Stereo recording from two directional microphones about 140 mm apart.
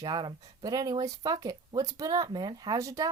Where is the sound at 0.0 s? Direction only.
30° right (ahead or behind).